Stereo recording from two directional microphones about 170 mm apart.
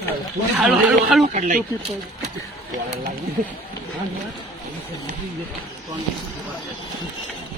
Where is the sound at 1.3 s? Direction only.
50° right (ahead or behind).